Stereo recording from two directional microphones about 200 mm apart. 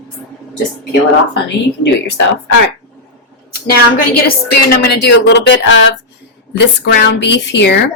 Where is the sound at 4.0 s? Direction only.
50° left (ahead or behind).